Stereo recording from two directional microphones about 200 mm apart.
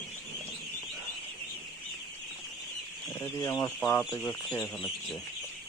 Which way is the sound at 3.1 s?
15° left (ahead or behind).